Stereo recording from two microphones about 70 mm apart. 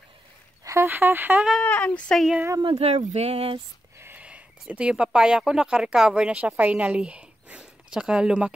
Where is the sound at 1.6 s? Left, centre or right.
Centre.